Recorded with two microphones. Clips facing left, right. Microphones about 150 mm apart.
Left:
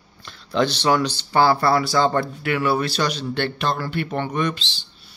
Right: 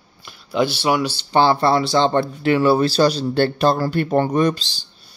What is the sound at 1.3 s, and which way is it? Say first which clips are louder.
Speech: right 2 dB; 25° right (ahead or behind).